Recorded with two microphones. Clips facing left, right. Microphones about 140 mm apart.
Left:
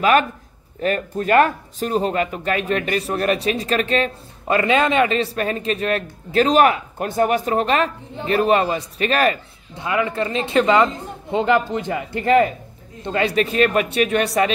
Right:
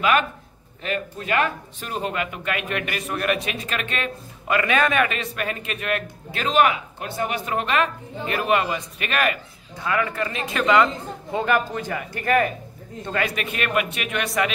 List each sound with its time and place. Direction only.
0.7 s speech: 45° left (ahead or behind)
9.8 s speech: 20° left (ahead or behind)